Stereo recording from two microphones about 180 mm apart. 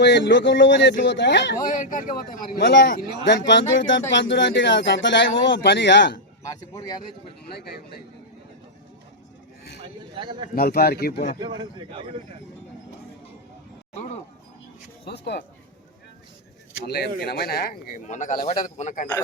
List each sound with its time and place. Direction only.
0.0 s speech: 85° left
1.5 s speech: 50° left (ahead or behind)
2.6 s speech: 75° left (ahead or behind)
6.4 s speech: 20° left (ahead or behind)
10.2 s speech: 25° right (ahead or behind)
10.5 s speech: 55° left (ahead or behind)
11.3 s speech: 25° right (ahead or behind)
15.0 s speech: 65° left (ahead or behind)
16.8 s speech: 65° left (ahead or behind); by 19.0 s 40° left (ahead or behind)